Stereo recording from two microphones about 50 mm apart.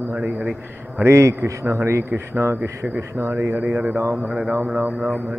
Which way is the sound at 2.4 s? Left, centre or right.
Right.